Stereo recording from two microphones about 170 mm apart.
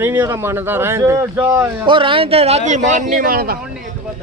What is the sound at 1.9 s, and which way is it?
A man's voice, 30° right (ahead or behind).